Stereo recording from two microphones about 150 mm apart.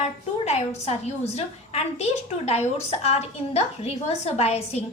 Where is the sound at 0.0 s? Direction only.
45° left (ahead or behind).